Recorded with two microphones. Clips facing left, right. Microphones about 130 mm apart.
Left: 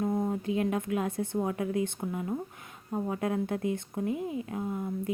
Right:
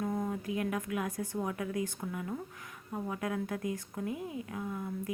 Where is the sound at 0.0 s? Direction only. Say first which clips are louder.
Left 5 dB; 25° left (ahead or behind).